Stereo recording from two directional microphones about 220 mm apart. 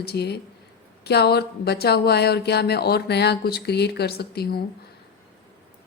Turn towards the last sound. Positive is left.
turn(degrees=45)  # may be behind; listen again after turning